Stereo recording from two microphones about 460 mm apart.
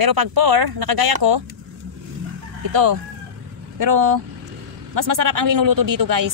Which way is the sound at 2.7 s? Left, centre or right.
Right.